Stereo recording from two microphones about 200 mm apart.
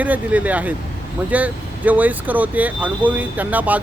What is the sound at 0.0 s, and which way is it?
Speech, 5° right (ahead or behind).